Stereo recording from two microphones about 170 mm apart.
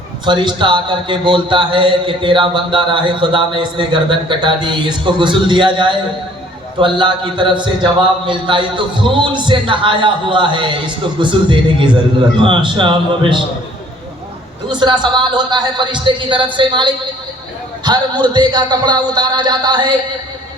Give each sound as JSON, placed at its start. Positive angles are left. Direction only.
{"t": 0.3, "sound": "a man's voice", "side_deg": -25}
{"t": 14.7, "sound": "a man's voice", "side_deg": -25}